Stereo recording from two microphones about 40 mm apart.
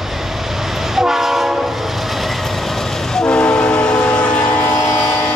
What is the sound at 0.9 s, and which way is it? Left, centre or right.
Train, centre.